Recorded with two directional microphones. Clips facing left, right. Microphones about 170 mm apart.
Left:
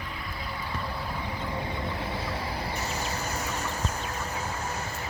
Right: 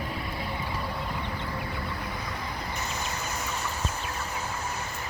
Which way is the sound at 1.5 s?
25° left (ahead or behind).